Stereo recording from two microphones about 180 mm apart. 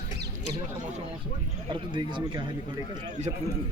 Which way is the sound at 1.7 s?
25° right (ahead or behind).